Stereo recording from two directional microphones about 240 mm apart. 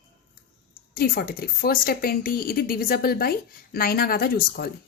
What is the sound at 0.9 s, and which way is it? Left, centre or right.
A woman's voice, left.